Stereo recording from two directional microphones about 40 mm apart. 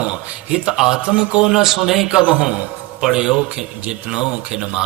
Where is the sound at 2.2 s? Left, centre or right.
Right.